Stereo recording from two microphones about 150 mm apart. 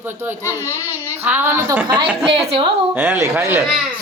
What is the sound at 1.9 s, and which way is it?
Speech, 30° right (ahead or behind).